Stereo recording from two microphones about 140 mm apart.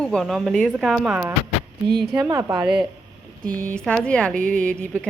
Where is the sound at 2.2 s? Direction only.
20° right (ahead or behind).